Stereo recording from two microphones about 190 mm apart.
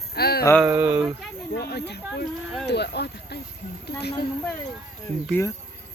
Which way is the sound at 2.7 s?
60° left (ahead or behind).